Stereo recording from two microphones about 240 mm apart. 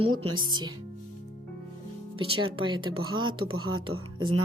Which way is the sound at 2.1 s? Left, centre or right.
Right.